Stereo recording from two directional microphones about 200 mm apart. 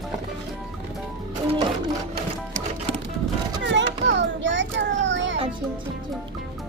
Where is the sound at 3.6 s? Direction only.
65° right (ahead or behind).